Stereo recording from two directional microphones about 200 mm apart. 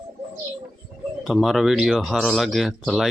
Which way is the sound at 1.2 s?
Centre (ahead or behind).